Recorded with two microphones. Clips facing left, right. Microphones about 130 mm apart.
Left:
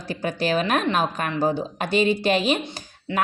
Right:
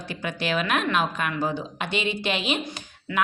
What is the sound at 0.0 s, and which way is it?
A woman's voice, 40° left (ahead or behind).